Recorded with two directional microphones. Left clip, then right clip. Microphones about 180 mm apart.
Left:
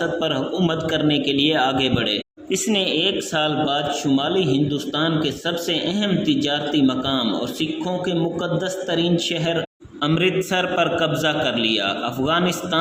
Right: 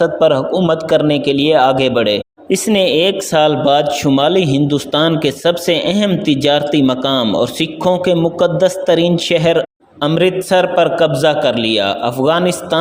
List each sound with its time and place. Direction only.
0.0 s a man's voice: 35° right (ahead or behind)
10.2 s a man's voice: 30° right (ahead or behind)